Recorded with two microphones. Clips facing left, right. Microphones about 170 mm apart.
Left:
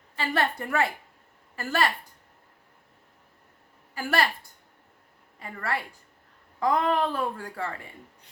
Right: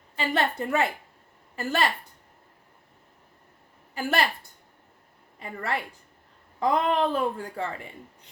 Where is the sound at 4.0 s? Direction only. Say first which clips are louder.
Right 1 dB; 20° right (ahead or behind).